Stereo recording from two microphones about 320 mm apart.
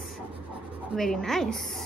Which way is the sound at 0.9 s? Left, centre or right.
Centre.